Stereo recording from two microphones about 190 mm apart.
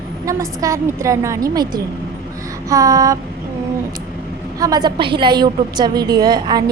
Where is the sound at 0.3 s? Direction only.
15° right (ahead or behind).